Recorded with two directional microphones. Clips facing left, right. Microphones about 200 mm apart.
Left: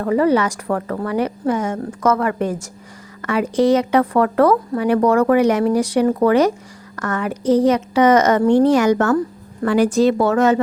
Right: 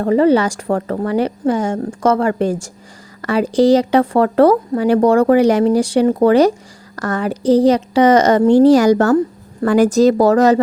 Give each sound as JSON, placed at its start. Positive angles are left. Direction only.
{"t": 0.0, "sound": "a woman's voice", "side_deg": -30}
{"t": 9.6, "sound": "a woman's voice", "side_deg": -45}